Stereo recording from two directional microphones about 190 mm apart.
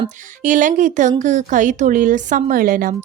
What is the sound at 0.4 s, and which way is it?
A woman's voice, 40° right (ahead or behind).